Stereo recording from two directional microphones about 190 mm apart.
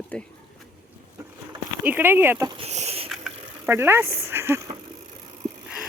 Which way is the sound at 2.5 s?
35° right (ahead or behind).